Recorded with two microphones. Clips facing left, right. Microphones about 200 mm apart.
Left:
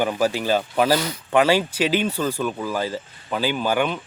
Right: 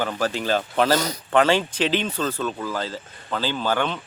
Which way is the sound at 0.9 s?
40° right (ahead or behind).